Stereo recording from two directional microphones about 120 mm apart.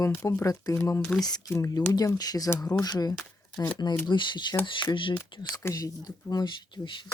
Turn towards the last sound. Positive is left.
turn(degrees=45)  # may be behind; listen again after turning